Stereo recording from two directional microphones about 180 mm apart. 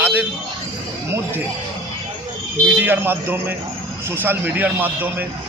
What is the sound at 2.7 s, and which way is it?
A man's voice, 10° right (ahead or behind).